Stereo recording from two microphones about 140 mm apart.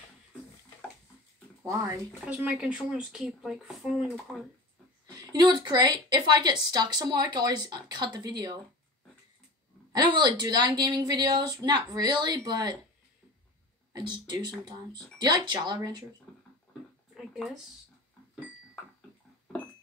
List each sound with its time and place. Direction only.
1.6 s speech: 20° right (ahead or behind)
2.2 s speech: 10° right (ahead or behind)
5.1 s a woman's voice: 30° right (ahead or behind)
9.9 s a woman's voice: 30° right (ahead or behind)
13.9 s a woman's voice: 30° right (ahead or behind)
17.1 s a sound: 5° right (ahead or behind)